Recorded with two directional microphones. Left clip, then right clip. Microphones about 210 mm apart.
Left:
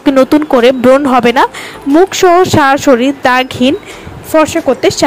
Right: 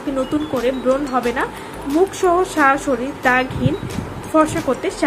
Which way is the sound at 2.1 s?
40° left (ahead or behind).